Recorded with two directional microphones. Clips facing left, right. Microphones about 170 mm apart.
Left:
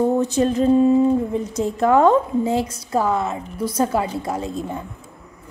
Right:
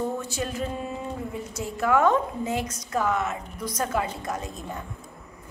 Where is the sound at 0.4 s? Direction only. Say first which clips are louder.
Left 15 dB; 35° left (ahead or behind).